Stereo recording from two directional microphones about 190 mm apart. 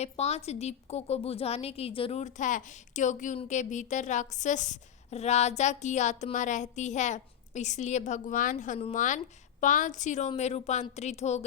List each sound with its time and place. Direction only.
0.0 s a woman's voice: 35° left (ahead or behind)